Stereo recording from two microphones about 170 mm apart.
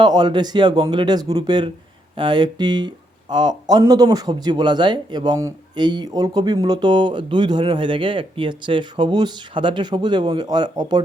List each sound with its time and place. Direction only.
0.0 s speech: 25° right (ahead or behind)